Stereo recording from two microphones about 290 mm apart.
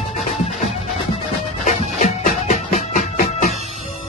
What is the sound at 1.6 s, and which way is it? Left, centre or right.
Music, left.